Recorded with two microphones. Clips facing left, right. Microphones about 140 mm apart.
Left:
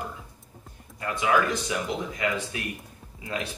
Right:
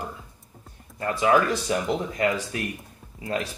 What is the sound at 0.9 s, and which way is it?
Speech, 40° right (ahead or behind).